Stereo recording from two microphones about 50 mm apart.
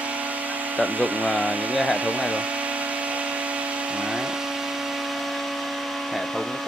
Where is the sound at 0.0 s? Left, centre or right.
Right; by 5.4 s centre.